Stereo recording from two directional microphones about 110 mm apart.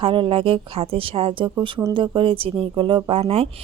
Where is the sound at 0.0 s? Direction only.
50° right (ahead or behind).